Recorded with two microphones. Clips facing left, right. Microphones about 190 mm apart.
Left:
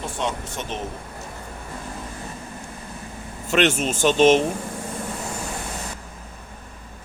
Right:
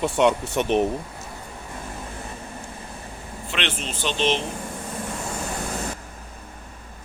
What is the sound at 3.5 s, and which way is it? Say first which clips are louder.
Speech: left 10 dB; 45° left (ahead or behind).